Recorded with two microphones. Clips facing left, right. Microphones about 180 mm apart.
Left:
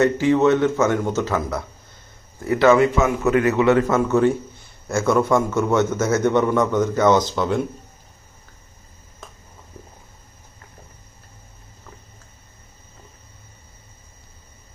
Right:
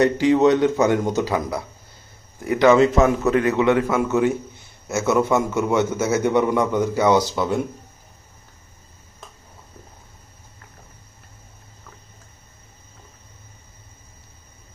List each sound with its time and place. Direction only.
0.0 s a man's voice: 15° right (ahead or behind)
2.9 s a man's voice: 35° right (ahead or behind)
3.5 s a man's voice: 15° right (ahead or behind)